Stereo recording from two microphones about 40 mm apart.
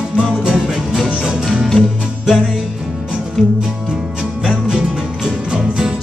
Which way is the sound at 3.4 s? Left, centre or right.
Centre.